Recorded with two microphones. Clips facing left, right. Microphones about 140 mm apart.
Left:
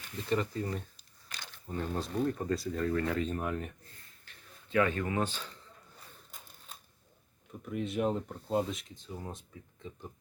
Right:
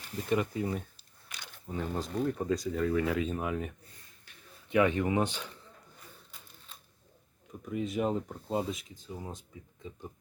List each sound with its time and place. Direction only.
0.3 s speech: 10° right (ahead or behind)
4.7 s speech: 15° right (ahead or behind)
6.3 s typewriter: 40° left (ahead or behind)
7.6 s speech: centre (ahead or behind)